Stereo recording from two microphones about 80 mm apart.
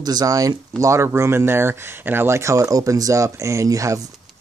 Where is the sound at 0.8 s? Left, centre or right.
Right.